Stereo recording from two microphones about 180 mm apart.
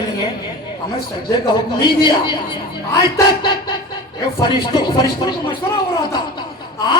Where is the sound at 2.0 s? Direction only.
25° left (ahead or behind).